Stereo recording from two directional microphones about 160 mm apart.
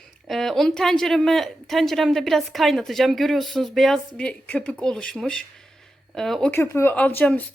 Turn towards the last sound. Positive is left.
turn(degrees=10)  # may be behind; listen again after turning